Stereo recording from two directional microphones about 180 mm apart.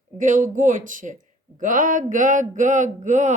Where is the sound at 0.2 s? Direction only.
45° right (ahead or behind).